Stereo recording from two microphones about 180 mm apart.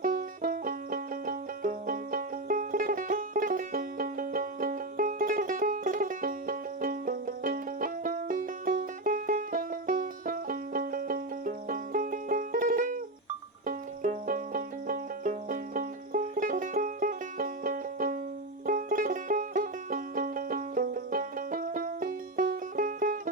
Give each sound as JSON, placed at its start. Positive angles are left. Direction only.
{"t": 0.0, "sound": "music", "side_deg": -50}